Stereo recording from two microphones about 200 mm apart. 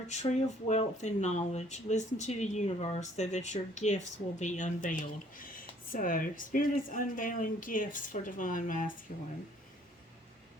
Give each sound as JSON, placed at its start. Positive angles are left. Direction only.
{"t": 0.7, "sound": "speech", "side_deg": 35}